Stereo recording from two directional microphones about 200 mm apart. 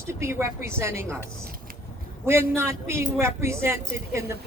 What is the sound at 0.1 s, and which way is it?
Speech, 15° right (ahead or behind).